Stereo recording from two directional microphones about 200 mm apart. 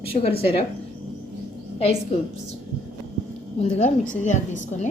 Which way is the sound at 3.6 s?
35° left (ahead or behind).